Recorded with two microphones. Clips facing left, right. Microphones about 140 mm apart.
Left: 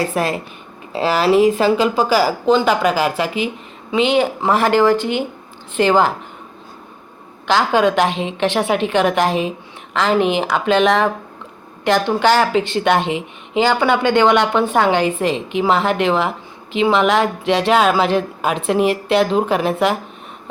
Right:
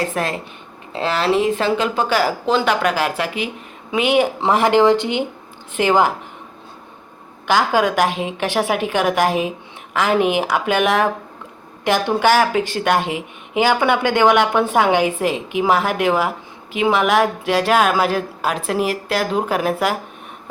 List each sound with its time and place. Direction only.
0.1 s speech: 10° left (ahead or behind)
3.9 s speech: 10° right (ahead or behind)
7.4 s speech: 10° right (ahead or behind)